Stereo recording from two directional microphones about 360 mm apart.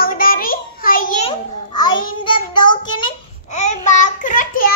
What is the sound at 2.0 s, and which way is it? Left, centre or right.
A child's voice, centre.